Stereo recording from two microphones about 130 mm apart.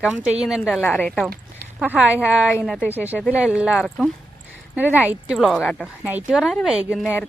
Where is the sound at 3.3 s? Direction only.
10° right (ahead or behind).